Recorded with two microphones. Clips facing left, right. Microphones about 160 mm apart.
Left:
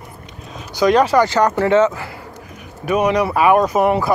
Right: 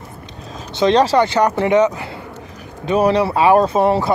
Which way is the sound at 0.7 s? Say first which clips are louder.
Even; 25° right (ahead or behind).